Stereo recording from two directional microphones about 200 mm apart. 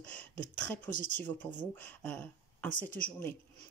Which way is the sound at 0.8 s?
40° left (ahead or behind).